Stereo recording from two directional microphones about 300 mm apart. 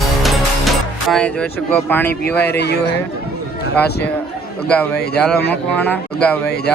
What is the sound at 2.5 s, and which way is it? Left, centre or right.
Speech, left.